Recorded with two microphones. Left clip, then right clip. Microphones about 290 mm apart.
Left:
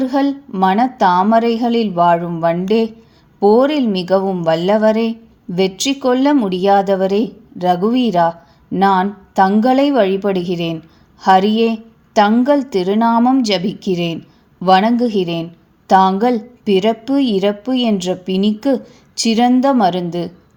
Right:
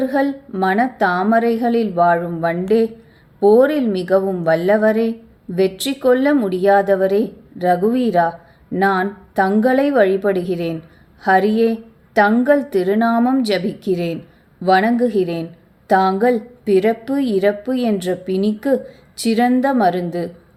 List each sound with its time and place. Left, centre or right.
0.0 s a woman's voice: centre